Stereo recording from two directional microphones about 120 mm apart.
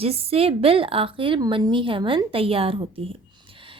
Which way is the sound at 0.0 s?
55° right (ahead or behind).